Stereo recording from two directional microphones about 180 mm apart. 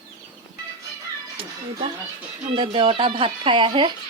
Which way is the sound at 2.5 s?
30° right (ahead or behind).